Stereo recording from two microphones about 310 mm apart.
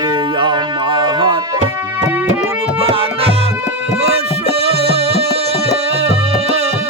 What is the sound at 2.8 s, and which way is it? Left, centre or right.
Music, centre.